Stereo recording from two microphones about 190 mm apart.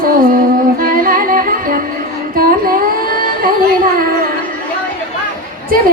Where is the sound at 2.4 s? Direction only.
50° right (ahead or behind).